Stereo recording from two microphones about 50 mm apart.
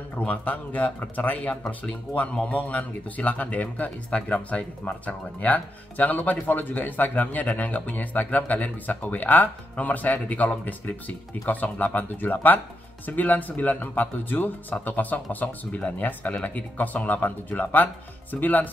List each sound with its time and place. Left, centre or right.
0.1 s speech: left